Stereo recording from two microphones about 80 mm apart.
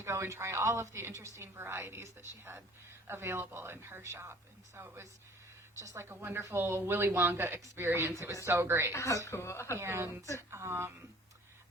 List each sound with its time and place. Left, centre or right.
0.0 s a woman's voice: right
6.1 s a woman's voice: right
8.9 s a woman's voice: left
9.7 s a woman's voice: right